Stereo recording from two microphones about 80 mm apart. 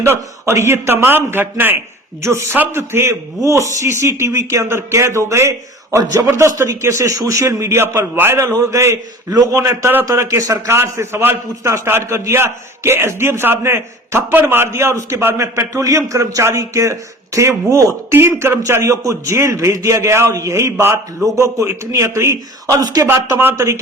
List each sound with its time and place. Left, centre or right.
0.0 s a man's voice: right
15.4 s a man's voice: right
23.0 s speech: right